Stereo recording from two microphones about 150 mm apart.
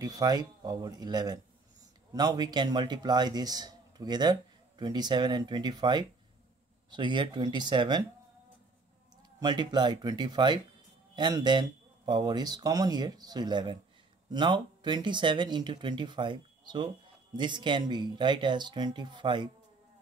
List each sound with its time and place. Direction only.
0.0 s a man's voice: 25° right (ahead or behind)
9.4 s a man's voice: 30° right (ahead or behind)